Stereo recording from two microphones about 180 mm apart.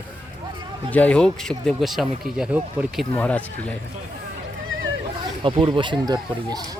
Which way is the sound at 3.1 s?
10° left (ahead or behind).